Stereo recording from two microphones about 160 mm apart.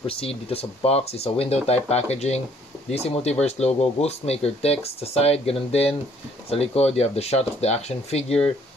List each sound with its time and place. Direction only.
0.0 s speech: 35° left (ahead or behind)